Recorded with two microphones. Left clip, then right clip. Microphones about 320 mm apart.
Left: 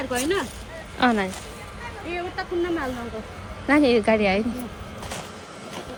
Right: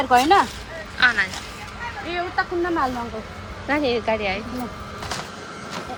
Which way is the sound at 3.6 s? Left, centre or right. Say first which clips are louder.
Left 3 dB; left.